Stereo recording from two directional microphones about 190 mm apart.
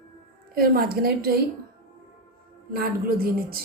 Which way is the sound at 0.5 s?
55° right (ahead or behind).